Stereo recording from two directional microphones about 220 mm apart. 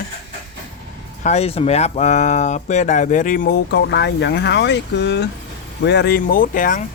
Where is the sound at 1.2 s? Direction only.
30° left (ahead or behind).